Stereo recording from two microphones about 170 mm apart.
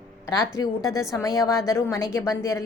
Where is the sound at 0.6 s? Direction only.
20° left (ahead or behind).